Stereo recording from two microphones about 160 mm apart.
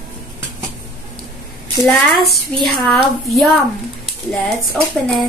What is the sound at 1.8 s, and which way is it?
A woman's voice, 5° left (ahead or behind).